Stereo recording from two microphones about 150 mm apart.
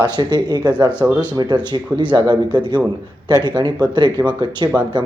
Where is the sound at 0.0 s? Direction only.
25° right (ahead or behind).